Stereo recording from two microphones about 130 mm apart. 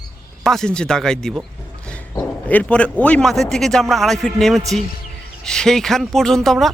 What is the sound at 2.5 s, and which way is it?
A man's voice, 10° left (ahead or behind).